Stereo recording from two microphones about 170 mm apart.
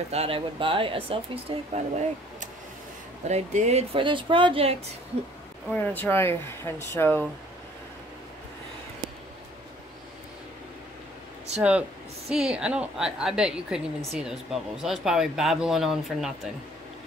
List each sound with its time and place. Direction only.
0.1 s speech: 35° right (ahead or behind)
3.3 s speech: 40° right (ahead or behind)
5.7 s speech: 10° left (ahead or behind)
11.5 s a woman's voice: 5° right (ahead or behind)